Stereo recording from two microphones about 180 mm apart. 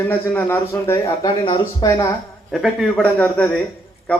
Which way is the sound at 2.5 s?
Centre (ahead or behind).